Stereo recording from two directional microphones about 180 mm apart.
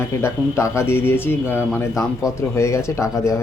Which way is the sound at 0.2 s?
15° left (ahead or behind).